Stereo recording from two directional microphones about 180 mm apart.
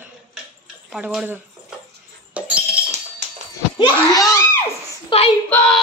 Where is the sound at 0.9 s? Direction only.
5° right (ahead or behind).